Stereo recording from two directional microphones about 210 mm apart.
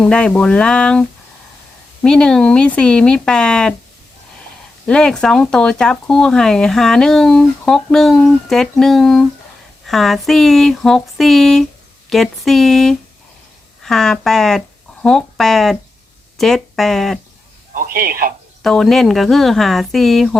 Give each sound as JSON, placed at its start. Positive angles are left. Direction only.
{"t": 0.0, "sound": "speech", "side_deg": 5}
{"t": 4.9, "sound": "speech", "side_deg": 5}
{"t": 17.7, "sound": "speech", "side_deg": -45}
{"t": 18.6, "sound": "speech", "side_deg": 0}